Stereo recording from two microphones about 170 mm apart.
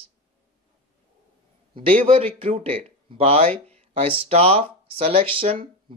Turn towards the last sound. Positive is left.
turn(degrees=-35)  # may be behind; listen again after turning